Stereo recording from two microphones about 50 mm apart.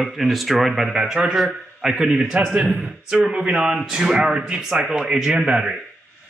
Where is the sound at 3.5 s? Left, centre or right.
Centre.